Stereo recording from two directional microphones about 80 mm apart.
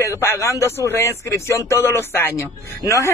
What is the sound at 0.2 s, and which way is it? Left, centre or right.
Speech, left.